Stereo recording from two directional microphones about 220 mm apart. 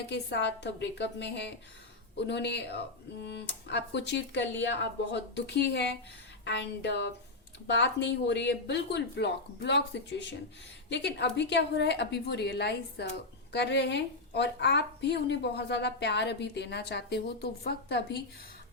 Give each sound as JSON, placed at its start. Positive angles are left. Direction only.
{"t": 0.1, "sound": "a woman's voice", "side_deg": 50}